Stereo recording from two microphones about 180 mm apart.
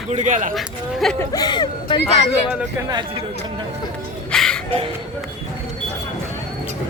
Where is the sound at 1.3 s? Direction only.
25° left (ahead or behind).